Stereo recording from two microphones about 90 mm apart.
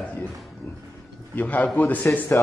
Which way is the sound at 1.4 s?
20° left (ahead or behind).